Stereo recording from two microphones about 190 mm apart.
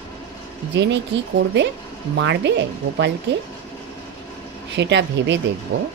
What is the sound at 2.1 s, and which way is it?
Speech, 70° right (ahead or behind).